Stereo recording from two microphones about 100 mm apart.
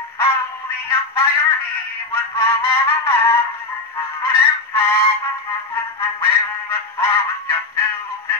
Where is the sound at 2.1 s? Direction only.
25° left (ahead or behind).